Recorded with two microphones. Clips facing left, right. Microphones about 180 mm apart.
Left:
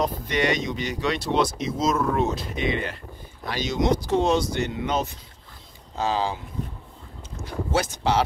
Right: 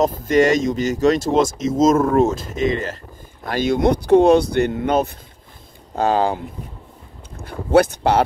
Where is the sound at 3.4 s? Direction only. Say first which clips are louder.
Right 6 dB; 55° right (ahead or behind).